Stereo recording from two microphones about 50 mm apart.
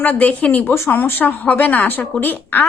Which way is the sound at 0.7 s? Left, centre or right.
Left.